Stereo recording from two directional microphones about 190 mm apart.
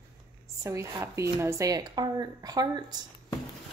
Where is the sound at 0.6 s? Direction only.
15° right (ahead or behind).